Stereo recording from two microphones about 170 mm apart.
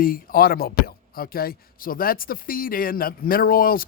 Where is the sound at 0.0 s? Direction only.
60° left (ahead or behind).